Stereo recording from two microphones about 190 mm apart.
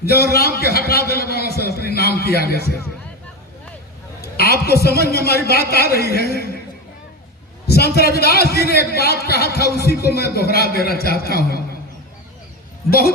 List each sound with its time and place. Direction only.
0.0 s a man's voice: 55° left (ahead or behind)
4.2 s a man's voice: 55° left (ahead or behind)
7.7 s a man's voice: 55° left (ahead or behind)